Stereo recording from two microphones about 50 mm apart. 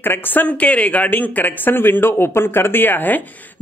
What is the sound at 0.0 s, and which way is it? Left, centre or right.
Speech, left.